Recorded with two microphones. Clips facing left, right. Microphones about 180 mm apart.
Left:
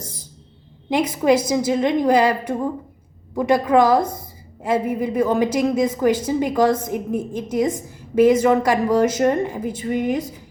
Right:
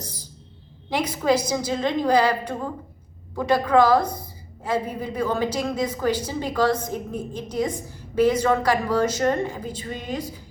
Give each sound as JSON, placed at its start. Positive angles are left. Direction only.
{"t": 0.9, "sound": "a woman's voice", "side_deg": 20}
{"t": 3.3, "sound": "a woman's voice", "side_deg": 20}